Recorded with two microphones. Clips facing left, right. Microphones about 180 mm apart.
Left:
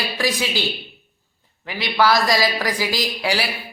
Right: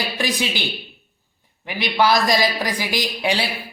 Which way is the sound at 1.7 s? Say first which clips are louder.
Even; 20° right (ahead or behind).